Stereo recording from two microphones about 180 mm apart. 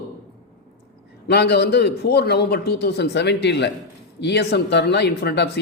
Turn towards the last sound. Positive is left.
turn(degrees=65)  # may be behind; listen again after turning